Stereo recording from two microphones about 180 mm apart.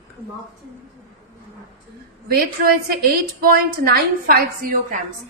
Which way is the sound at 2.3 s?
55° right (ahead or behind).